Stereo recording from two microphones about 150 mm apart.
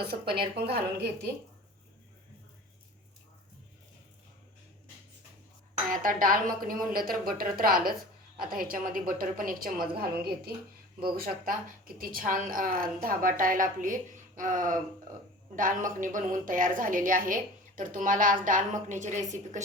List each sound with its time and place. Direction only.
0.1 s a woman's voice: 90° right
5.9 s a woman's voice: 65° right (ahead or behind); by 10.5 s 85° right
11.2 s a woman's voice: 75° right (ahead or behind); by 19.6 s 55° right (ahead or behind)